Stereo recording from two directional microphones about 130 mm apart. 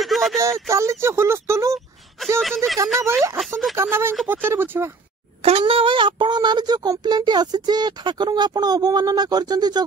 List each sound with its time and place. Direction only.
0.0 s a sound: centre (ahead or behind)
0.7 s speech: 20° right (ahead or behind)
2.3 s speech: 5° left (ahead or behind)
3.0 s speech: 20° right (ahead or behind)
3.3 s speech: centre (ahead or behind)
3.7 s speech: 20° right (ahead or behind)
5.4 s speech: 50° right (ahead or behind); by 9.8 s 30° right (ahead or behind)